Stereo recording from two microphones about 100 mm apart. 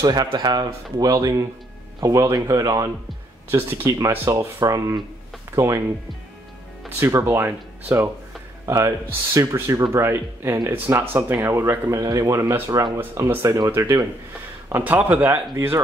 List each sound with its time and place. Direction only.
0.0 s speech: 40° right (ahead or behind)
2.0 s speech: 25° right (ahead or behind)
2.3 s speech: 35° right (ahead or behind)
3.4 s speech: 25° right (ahead or behind)
7.0 s speech: 25° right (ahead or behind)
12.0 s speech: 35° right (ahead or behind)